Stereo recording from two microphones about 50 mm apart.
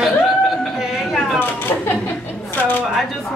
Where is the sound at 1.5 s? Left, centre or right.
Left.